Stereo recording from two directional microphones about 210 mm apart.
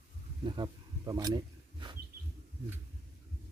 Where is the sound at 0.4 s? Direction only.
20° right (ahead or behind).